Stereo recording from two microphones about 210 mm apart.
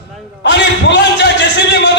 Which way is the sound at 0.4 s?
55° left (ahead or behind).